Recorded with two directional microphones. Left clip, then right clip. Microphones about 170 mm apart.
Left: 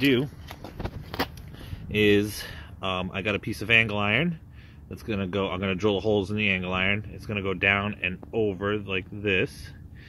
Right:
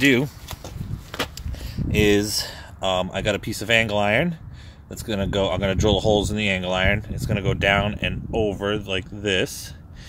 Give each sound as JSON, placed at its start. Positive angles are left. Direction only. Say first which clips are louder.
{"t": 0.0, "sound": "speech", "louder": "right 5 dB", "side_deg": -35}
{"t": 1.1, "sound": "a sound", "louder": "right 2 dB", "side_deg": 80}
{"t": 1.9, "sound": "speech", "louder": "right 3 dB", "side_deg": -20}